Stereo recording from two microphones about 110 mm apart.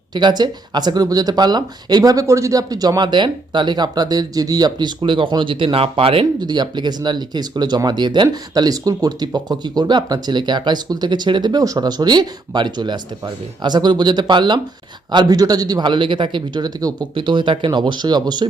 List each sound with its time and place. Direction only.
0.1 s speech: 40° right (ahead or behind)
6.4 s a man's voice: 40° right (ahead or behind)